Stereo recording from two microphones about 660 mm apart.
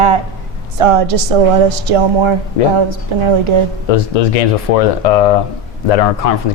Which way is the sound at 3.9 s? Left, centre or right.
Left.